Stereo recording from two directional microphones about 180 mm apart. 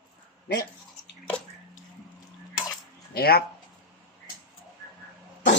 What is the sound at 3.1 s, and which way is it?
Speech, 60° left (ahead or behind).